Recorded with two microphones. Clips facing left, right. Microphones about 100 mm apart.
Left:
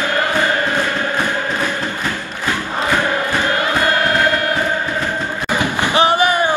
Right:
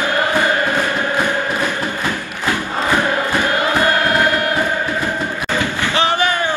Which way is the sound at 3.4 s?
20° right (ahead or behind).